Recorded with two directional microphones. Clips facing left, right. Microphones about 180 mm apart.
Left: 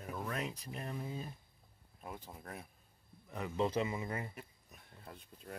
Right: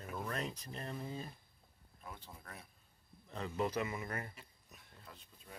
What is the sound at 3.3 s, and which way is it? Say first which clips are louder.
Speech: left 2 dB; 15° left (ahead or behind).